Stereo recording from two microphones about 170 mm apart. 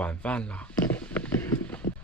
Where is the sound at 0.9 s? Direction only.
10° left (ahead or behind).